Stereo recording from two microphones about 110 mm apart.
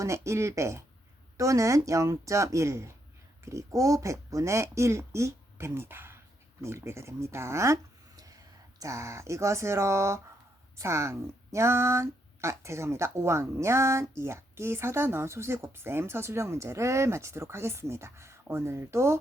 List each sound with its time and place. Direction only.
0.0 s speech: 25° right (ahead or behind)